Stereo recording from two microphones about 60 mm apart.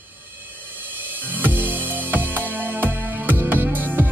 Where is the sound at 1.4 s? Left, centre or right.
Right.